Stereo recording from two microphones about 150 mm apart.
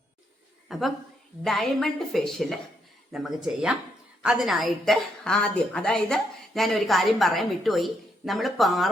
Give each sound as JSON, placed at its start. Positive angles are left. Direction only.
{"t": 0.7, "sound": "a woman's voice", "side_deg": 0}